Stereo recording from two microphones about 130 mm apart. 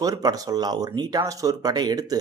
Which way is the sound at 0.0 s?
30° right (ahead or behind).